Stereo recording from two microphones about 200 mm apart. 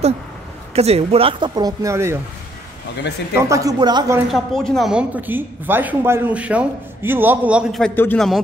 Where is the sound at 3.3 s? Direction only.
15° right (ahead or behind).